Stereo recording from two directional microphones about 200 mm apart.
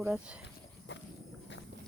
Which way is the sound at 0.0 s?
5° right (ahead or behind).